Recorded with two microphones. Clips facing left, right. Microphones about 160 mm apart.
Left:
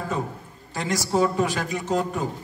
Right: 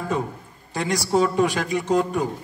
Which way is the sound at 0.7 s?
15° right (ahead or behind).